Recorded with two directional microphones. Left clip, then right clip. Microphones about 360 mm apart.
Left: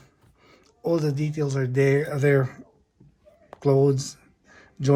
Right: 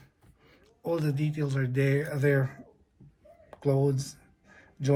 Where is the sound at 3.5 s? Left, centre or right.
Left.